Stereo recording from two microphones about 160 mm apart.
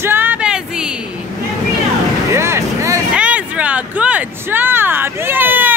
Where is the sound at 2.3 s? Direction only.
15° right (ahead or behind).